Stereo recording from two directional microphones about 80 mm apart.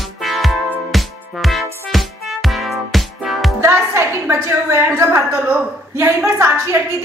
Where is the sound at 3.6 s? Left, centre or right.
Right.